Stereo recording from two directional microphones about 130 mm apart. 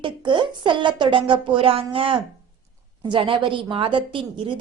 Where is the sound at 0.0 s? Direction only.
40° right (ahead or behind).